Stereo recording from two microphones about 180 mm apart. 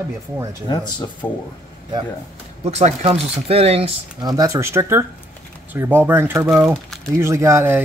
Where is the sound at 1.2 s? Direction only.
15° left (ahead or behind).